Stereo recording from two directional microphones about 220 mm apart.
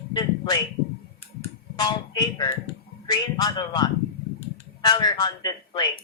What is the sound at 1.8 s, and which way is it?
A man's voice, 20° left (ahead or behind).